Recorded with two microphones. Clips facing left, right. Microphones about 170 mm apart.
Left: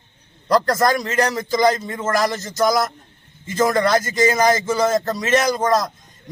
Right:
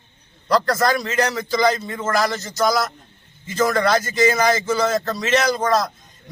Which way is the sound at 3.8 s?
45° left (ahead or behind).